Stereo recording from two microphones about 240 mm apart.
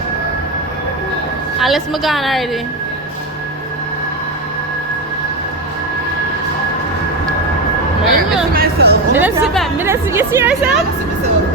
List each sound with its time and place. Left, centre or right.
1.5 s a woman's voice: centre
8.0 s a sound: centre
8.5 s chatter: right
9.1 s a woman's voice: centre